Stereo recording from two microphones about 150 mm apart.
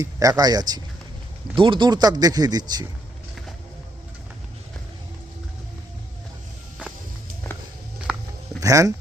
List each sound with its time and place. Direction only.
0.0 s speech: 20° right (ahead or behind)
8.1 s a sound: 5° right (ahead or behind)
8.6 s speech: 20° right (ahead or behind)